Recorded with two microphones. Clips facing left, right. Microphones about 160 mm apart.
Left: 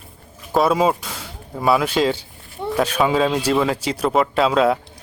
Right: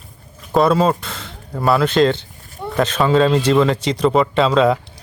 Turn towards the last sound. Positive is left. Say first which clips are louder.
# right 2 dB
turn(degrees=5)  # may be behind; listen again after turning